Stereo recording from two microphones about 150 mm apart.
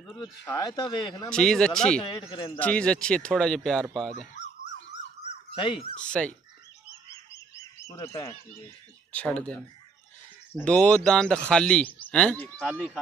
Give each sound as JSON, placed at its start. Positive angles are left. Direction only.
{"t": 0.2, "sound": "speech", "side_deg": 25}
{"t": 1.3, "sound": "speech", "side_deg": 5}
{"t": 2.0, "sound": "speech", "side_deg": 35}
{"t": 2.6, "sound": "speech", "side_deg": 5}
{"t": 5.6, "sound": "speech", "side_deg": 35}
{"t": 5.9, "sound": "speech", "side_deg": 5}
{"t": 7.9, "sound": "speech", "side_deg": 20}
{"t": 9.1, "sound": "speech", "side_deg": 10}
{"t": 10.5, "sound": "speech", "side_deg": 10}